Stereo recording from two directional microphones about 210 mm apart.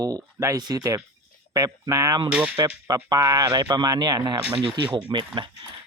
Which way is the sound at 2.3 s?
5° right (ahead or behind).